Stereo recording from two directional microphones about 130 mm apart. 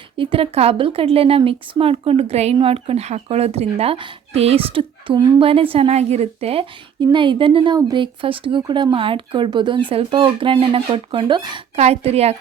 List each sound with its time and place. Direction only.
0.2 s speech: 45° right (ahead or behind)
7.0 s speech: 35° right (ahead or behind)
11.8 s speech: 55° right (ahead or behind)